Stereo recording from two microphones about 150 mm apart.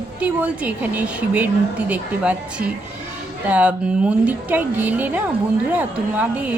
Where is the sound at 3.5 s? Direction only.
10° right (ahead or behind).